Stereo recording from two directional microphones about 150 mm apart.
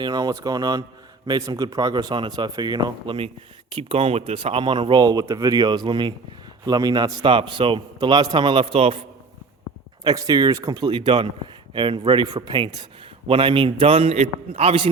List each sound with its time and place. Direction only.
0.0 s a man's voice: 25° right (ahead or behind)
10.0 s a man's voice: 25° right (ahead or behind)